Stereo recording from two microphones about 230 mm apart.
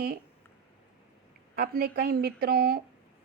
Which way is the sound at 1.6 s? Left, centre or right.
Right.